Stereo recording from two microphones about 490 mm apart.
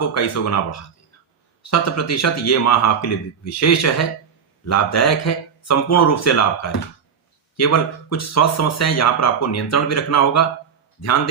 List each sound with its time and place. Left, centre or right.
0.1 s speech: left